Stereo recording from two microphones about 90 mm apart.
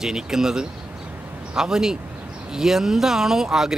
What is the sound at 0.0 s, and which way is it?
Speech, 5° right (ahead or behind).